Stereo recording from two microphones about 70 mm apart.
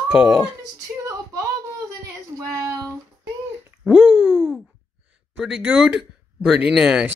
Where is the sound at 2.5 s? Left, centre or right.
Right.